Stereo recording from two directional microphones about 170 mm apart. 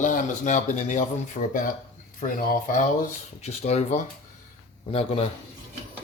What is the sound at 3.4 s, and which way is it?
Speech, 40° left (ahead or behind).